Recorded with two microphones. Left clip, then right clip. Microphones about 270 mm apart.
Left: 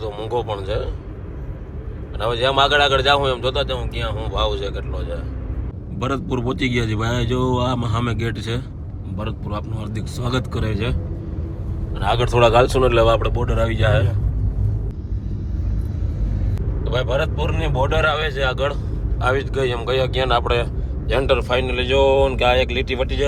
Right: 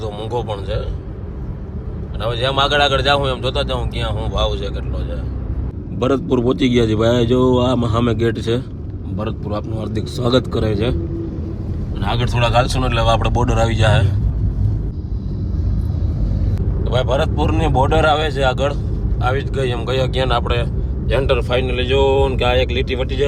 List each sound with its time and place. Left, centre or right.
0.0 s a man's voice: centre
2.2 s a man's voice: centre
6.0 s speech: centre
11.9 s speech: centre
16.8 s a man's voice: centre